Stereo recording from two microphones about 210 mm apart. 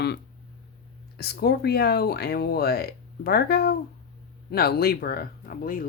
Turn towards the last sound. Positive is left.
turn(degrees=45)  # may be behind; listen again after turning